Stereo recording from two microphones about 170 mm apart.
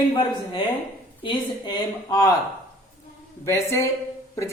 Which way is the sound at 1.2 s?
30° left (ahead or behind).